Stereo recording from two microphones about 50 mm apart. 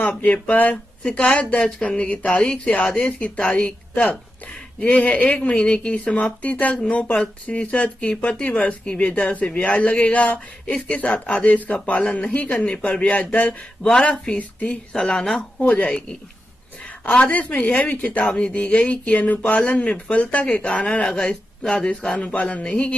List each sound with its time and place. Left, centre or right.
0.2 s speech: left
1.0 s speech: left
13.8 s speech: centre
15.6 s speech: left
17.1 s speech: left